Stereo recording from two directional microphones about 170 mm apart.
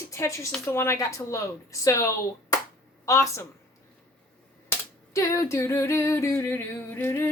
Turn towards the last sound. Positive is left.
turn(degrees=15)  # may be behind; listen again after turning